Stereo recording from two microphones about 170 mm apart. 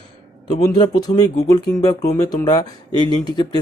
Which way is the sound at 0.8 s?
25° left (ahead or behind).